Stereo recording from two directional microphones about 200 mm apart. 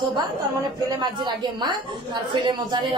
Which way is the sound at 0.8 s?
20° right (ahead or behind).